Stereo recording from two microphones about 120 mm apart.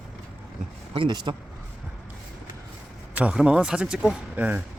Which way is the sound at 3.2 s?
10° right (ahead or behind).